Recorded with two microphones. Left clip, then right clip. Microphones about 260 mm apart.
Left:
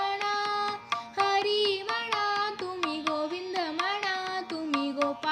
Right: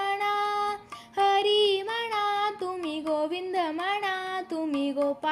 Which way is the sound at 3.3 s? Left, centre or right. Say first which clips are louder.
Right 3 dB; centre.